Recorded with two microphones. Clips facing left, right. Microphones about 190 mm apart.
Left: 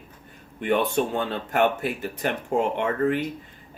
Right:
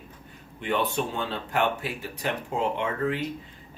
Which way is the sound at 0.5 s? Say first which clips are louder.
Left 4 dB; 50° left (ahead or behind).